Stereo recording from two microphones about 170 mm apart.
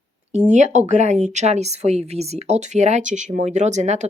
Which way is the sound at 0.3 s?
45° right (ahead or behind).